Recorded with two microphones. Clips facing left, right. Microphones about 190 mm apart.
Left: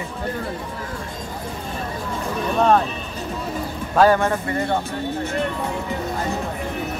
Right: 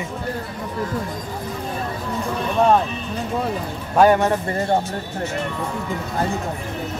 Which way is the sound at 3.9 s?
15° right (ahead or behind).